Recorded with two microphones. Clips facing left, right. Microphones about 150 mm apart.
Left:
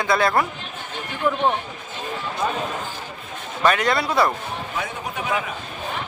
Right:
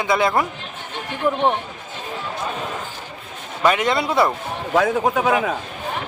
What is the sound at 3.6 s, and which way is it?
Speech, 20° right (ahead or behind).